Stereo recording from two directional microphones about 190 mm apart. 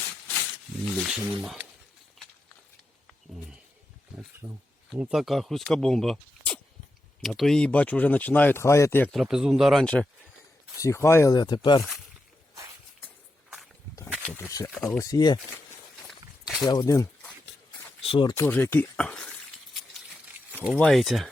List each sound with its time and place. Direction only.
1.0 s speech: 5° right (ahead or behind)
4.4 s speech: 25° right (ahead or behind)
4.9 s speech: 5° right (ahead or behind); by 9.0 s 15° left (ahead or behind)
9.1 s speech: 5° right (ahead or behind); by 11.9 s 25° left (ahead or behind)
14.3 s a sound: 15° left (ahead or behind)
14.7 s speech: 10° left (ahead or behind)
16.0 s walk: centre (ahead or behind)
16.6 s speech: 20° left (ahead or behind)
18.4 s speech: 10° left (ahead or behind)
20.5 s a sound: 10° right (ahead or behind)
20.7 s speech: centre (ahead or behind)